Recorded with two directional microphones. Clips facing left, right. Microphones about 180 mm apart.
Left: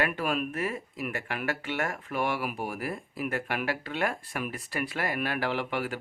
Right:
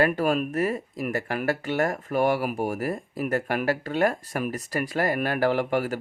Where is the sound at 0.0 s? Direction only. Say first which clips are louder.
Right 6 dB; 40° right (ahead or behind).